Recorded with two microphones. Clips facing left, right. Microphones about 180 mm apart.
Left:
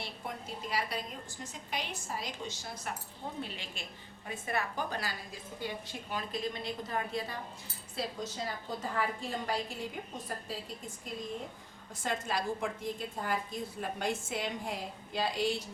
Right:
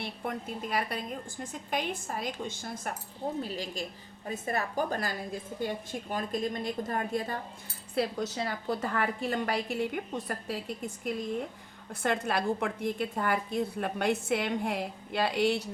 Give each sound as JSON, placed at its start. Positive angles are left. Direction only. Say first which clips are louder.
{"t": 0.0, "sound": "a woman's voice", "louder": "right 6 dB", "side_deg": -55}
{"t": 3.4, "sound": "a woman's voice", "louder": "right 8 dB", "side_deg": -40}
{"t": 7.9, "sound": "a woman's voice", "louder": "right 7 dB", "side_deg": -70}
{"t": 12.0, "sound": "a woman's voice", "louder": "right 5 dB", "side_deg": -60}